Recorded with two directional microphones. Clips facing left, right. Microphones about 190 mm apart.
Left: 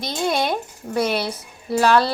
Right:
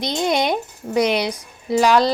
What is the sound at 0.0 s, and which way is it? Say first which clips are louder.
Speech: right 2 dB; 20° right (ahead or behind).